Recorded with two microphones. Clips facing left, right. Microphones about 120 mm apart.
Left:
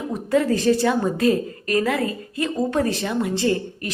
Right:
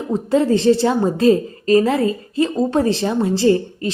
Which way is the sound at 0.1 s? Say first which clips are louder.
Right 4 dB; 25° right (ahead or behind).